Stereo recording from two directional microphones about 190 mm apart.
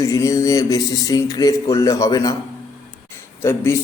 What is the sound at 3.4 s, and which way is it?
Speech, 15° left (ahead or behind).